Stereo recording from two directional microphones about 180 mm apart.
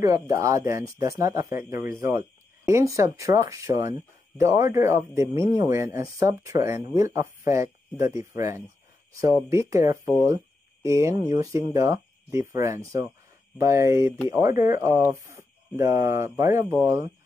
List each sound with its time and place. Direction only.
0.0 s speech: 20° right (ahead or behind)